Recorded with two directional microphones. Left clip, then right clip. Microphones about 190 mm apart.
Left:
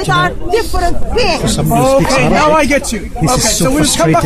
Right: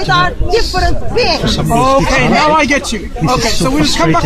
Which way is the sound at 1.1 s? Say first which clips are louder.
Right 1 dB; 5° right (ahead or behind).